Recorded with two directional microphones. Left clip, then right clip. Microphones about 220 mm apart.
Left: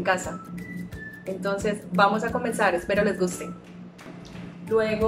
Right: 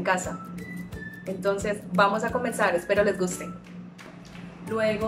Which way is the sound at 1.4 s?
Centre (ahead or behind).